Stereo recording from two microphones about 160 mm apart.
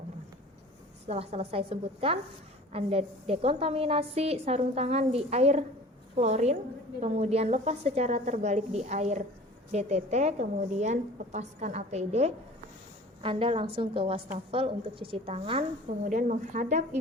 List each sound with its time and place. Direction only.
1.0 s a woman's voice: 40° right (ahead or behind)
16.0 s a woman's voice: 50° right (ahead or behind)